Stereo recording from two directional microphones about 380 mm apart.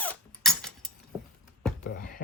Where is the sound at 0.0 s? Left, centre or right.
Centre.